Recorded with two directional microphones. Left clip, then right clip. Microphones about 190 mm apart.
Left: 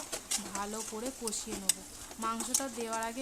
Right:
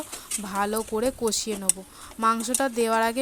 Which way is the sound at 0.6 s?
40° right (ahead or behind).